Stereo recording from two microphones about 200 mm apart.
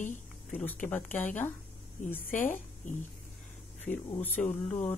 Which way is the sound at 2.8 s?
40° left (ahead or behind).